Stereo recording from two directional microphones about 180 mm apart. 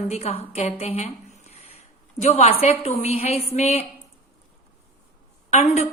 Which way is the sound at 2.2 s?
40° left (ahead or behind).